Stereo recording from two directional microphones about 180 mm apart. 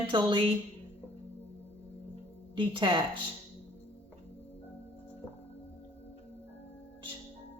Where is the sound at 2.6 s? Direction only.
30° right (ahead or behind).